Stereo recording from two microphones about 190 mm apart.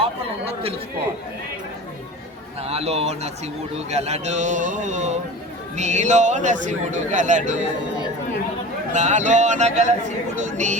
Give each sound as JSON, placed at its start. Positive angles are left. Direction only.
{"t": 0.0, "sound": "chatter", "side_deg": -30}
{"t": 2.6, "sound": "a man's voice", "side_deg": -35}
{"t": 8.9, "sound": "a man's voice", "side_deg": -40}